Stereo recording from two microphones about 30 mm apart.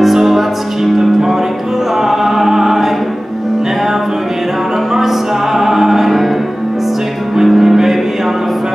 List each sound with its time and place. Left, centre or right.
0.0 s music: centre
2.0 s choir: centre
4.9 s music: centre
7.4 s music: centre